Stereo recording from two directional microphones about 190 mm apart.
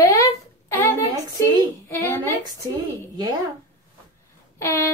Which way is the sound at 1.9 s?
15° left (ahead or behind).